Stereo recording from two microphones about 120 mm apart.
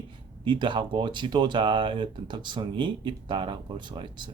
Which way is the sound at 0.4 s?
40° right (ahead or behind).